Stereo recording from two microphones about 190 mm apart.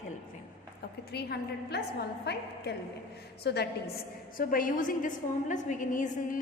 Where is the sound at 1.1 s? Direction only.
60° left (ahead or behind).